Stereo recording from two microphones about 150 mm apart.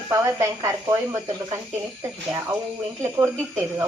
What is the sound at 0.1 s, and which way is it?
Speech, 20° right (ahead or behind).